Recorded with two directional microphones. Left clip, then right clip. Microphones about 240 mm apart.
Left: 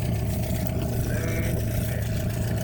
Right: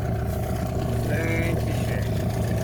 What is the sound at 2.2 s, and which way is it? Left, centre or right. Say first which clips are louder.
Vehicle: right 4 dB; centre.